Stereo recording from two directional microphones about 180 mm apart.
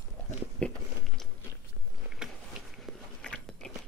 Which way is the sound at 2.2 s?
Centre (ahead or behind).